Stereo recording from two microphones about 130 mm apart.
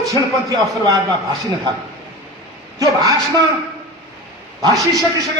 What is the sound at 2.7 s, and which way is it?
Speech, 25° right (ahead or behind).